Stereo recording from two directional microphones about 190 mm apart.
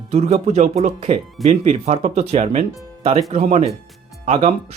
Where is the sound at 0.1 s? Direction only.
35° right (ahead or behind).